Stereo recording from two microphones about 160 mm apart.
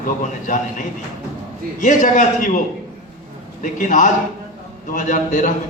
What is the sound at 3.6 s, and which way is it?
A man's voice, 55° left (ahead or behind).